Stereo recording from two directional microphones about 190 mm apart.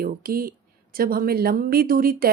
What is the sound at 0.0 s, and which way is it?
Speech, 50° right (ahead or behind).